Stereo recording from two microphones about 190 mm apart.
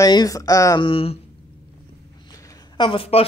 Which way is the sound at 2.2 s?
20° left (ahead or behind).